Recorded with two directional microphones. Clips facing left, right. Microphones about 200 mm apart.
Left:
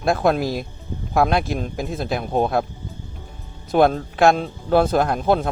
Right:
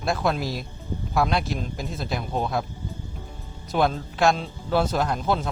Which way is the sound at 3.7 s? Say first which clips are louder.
Left 7 dB; 55° left (ahead or behind).